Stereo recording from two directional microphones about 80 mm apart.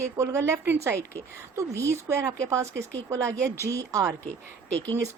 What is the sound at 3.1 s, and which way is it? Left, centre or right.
Speech, right.